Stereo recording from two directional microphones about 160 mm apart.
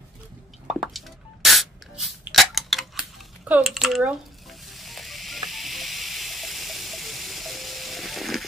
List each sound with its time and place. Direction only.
0.7 s spray: centre (ahead or behind)
3.4 s sizzle: 5° right (ahead or behind)